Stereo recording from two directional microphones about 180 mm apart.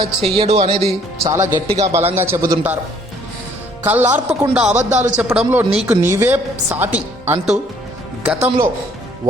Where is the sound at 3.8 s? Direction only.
10° right (ahead or behind).